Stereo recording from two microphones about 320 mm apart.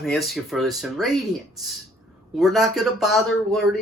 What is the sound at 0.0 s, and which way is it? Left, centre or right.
Speech, centre.